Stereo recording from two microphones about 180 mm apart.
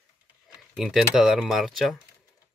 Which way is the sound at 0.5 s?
Centre (ahead or behind).